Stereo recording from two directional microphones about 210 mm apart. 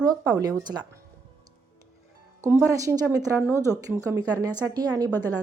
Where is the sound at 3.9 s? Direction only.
15° right (ahead or behind).